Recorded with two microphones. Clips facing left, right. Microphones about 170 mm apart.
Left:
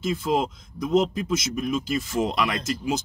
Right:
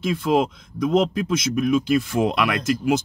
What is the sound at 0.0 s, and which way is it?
Speech, 60° right (ahead or behind).